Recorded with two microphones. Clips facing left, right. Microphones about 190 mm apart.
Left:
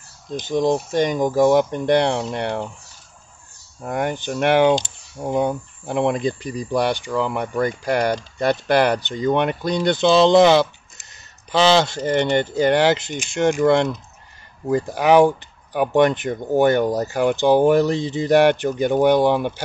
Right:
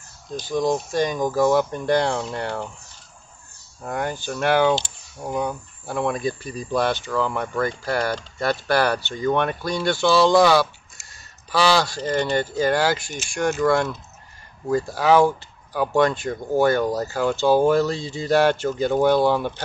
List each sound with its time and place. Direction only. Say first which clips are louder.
0.3 s speech: left 3 dB; 20° left (ahead or behind)
3.8 s speech: left 3 dB; 20° left (ahead or behind)